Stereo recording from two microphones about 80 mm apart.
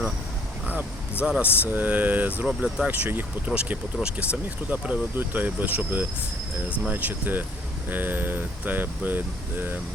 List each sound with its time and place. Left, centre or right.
1.2 s speech: centre